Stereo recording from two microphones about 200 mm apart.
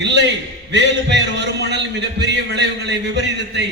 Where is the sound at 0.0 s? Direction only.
60° right (ahead or behind).